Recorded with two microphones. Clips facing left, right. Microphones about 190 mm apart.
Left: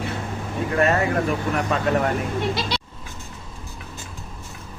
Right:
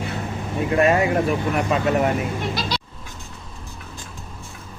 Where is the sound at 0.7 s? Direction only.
15° right (ahead or behind).